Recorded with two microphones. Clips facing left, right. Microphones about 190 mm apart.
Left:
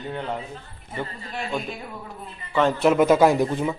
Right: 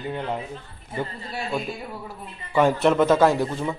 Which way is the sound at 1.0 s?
5° right (ahead or behind).